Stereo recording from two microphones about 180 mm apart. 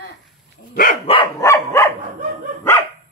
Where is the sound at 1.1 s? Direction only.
30° left (ahead or behind).